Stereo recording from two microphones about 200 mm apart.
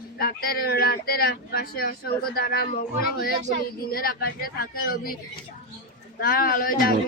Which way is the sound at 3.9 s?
50° left (ahead or behind).